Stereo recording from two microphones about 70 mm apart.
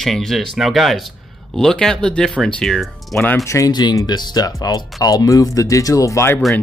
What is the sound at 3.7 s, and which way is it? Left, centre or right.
Speech, left.